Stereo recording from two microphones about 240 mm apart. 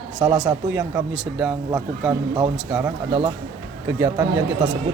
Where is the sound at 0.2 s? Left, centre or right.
Centre.